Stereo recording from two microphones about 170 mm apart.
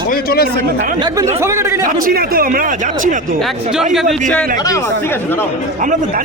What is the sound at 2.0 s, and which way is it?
Speech, 60° right (ahead or behind).